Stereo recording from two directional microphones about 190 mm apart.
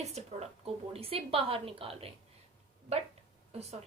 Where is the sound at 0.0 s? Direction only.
35° right (ahead or behind).